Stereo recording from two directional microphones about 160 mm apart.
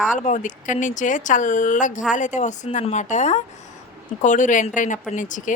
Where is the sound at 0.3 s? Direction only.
50° left (ahead or behind).